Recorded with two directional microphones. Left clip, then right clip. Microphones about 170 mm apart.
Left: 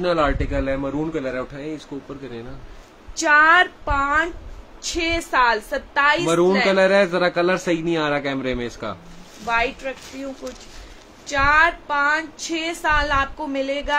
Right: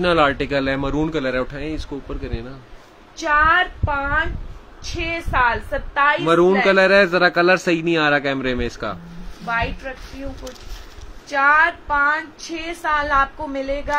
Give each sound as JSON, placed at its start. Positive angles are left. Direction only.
{"t": 0.0, "sound": "a man's voice", "side_deg": -45}
{"t": 3.2, "sound": "a woman's voice", "side_deg": 30}
{"t": 4.8, "sound": "a woman's voice", "side_deg": 45}
{"t": 6.2, "sound": "a man's voice", "side_deg": -15}
{"t": 9.5, "sound": "a woman's voice", "side_deg": 40}
{"t": 11.2, "sound": "a woman's voice", "side_deg": 40}